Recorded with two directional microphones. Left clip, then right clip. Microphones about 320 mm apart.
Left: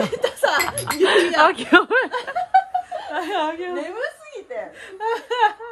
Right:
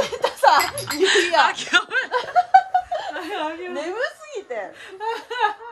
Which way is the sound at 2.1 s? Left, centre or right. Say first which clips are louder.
Right 3 dB; right.